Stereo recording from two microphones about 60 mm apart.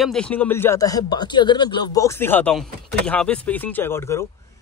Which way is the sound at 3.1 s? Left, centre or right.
Left.